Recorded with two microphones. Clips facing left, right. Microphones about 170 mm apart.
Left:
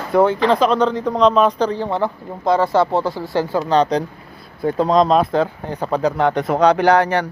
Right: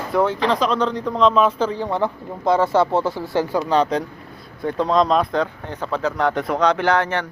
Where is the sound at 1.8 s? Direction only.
15° left (ahead or behind).